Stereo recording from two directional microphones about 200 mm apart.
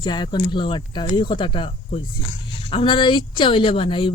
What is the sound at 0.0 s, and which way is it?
Speech, 20° left (ahead or behind).